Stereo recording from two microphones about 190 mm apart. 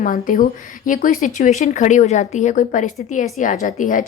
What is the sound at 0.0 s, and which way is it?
A woman's voice, 45° left (ahead or behind).